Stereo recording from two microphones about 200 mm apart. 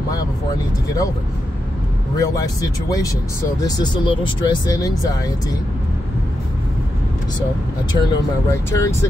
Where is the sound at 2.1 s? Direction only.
15° left (ahead or behind).